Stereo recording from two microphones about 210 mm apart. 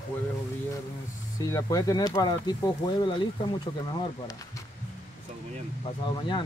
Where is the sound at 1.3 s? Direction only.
15° left (ahead or behind).